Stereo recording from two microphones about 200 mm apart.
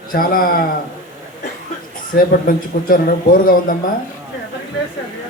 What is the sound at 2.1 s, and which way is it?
A man's voice, 45° left (ahead or behind).